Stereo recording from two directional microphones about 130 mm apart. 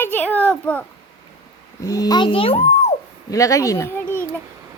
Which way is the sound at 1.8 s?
25° left (ahead or behind).